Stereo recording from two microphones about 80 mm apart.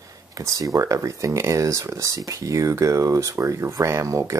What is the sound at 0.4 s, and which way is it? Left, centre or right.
Speech, right.